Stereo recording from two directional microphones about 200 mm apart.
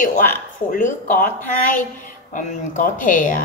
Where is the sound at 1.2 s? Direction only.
40° left (ahead or behind).